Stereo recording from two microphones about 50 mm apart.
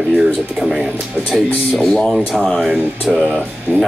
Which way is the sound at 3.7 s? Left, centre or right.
Right.